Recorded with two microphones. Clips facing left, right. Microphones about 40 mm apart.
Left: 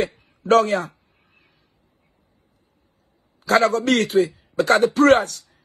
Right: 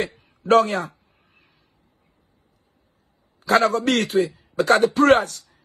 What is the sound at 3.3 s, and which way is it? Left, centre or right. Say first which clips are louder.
Speech: left 1 dB; right.